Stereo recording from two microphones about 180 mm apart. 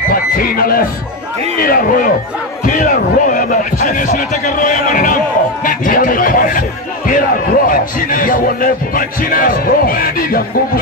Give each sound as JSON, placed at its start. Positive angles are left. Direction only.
{"t": 0.1, "sound": "a man's voice", "side_deg": 55}